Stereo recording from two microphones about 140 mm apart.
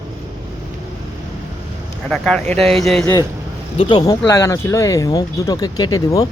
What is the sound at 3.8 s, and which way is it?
Speech, 40° left (ahead or behind).